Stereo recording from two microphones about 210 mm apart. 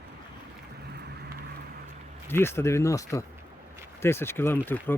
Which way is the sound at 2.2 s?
10° left (ahead or behind).